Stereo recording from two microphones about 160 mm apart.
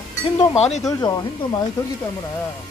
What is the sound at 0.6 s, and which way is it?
Speech, 45° left (ahead or behind).